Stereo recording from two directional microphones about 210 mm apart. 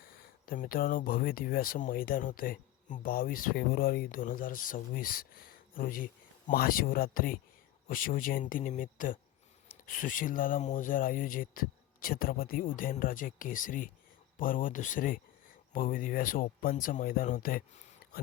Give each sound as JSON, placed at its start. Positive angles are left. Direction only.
{"t": 0.4, "sound": "speech", "side_deg": 45}